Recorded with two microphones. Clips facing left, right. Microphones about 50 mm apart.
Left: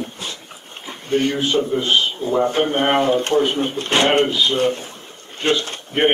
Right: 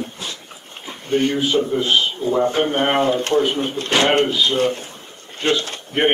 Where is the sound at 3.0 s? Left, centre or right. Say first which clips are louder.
Left 1 dB; left.